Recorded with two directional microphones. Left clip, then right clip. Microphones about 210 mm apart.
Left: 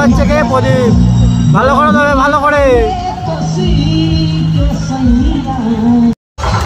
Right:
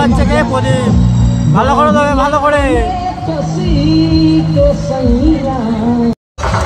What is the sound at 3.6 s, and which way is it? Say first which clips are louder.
Speech: right 4 dB; 20° right (ahead or behind).